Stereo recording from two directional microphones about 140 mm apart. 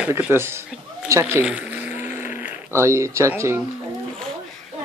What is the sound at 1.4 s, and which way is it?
Zipper, 10° right (ahead or behind).